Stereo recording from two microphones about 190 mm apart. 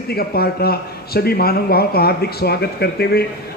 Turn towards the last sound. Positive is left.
turn(degrees=55)  # may be behind; listen again after turning